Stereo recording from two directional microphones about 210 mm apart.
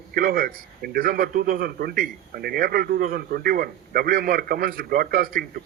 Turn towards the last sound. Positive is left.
turn(degrees=-45)  # may be behind; listen again after turning